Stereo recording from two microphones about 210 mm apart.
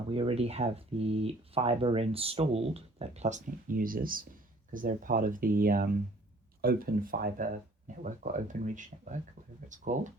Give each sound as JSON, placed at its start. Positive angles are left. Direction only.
{"t": 0.1, "sound": "speech", "side_deg": -25}